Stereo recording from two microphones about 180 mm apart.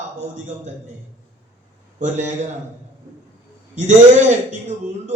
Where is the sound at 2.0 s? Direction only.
40° right (ahead or behind).